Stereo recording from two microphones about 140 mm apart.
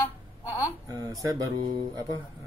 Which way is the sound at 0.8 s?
25° right (ahead or behind).